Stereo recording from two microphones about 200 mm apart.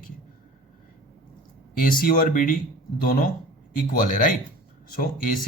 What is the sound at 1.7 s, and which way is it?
A man's voice, 45° left (ahead or behind).